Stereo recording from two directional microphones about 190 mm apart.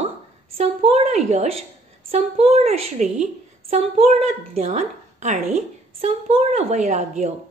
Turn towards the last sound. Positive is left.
turn(degrees=-35)  # may be behind; listen again after turning